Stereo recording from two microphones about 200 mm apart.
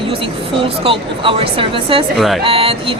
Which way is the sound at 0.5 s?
25° right (ahead or behind).